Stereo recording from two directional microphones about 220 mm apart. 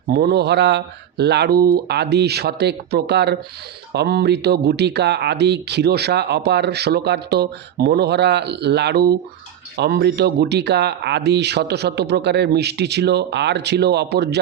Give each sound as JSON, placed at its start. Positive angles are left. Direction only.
{"t": 0.1, "sound": "speech", "side_deg": -45}